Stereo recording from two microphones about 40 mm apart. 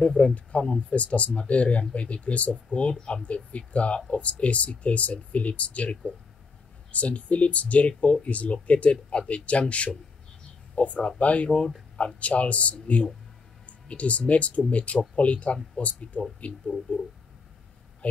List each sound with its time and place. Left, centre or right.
0.0 s speech: left